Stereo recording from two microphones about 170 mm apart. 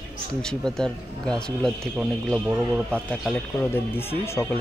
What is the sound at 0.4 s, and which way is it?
Speech, 5° left (ahead or behind).